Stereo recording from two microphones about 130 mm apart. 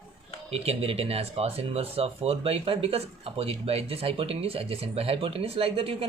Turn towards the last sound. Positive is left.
turn(degrees=-45)  # may be behind; listen again after turning